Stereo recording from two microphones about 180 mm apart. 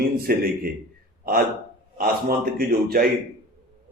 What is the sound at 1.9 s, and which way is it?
A man's voice, 55° right (ahead or behind).